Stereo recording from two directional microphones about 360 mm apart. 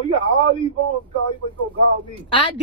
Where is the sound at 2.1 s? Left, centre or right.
Centre.